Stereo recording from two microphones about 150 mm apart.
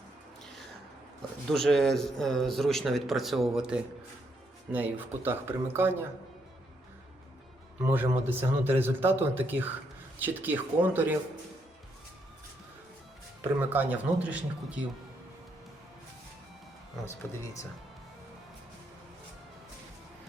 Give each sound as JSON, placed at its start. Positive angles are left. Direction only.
{"t": 1.5, "sound": "a man's voice", "side_deg": 5}
{"t": 7.8, "sound": "speech", "side_deg": -15}
{"t": 13.6, "sound": "speech", "side_deg": -10}